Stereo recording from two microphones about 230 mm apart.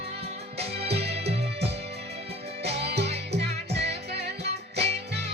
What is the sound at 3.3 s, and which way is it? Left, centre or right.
Music, right.